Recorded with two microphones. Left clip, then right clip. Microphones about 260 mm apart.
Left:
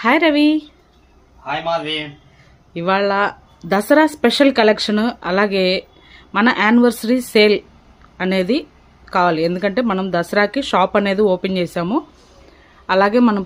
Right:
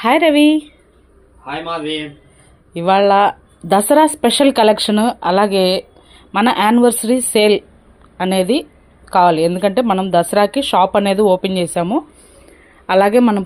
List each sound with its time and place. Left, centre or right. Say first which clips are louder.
0.0 s speech: right 3 dB; centre
1.5 s a man's voice: left 2 dB; left
2.7 s speech: right 5 dB; centre